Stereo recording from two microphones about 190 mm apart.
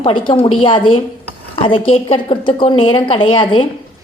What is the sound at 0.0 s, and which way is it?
A woman's voice, 25° left (ahead or behind).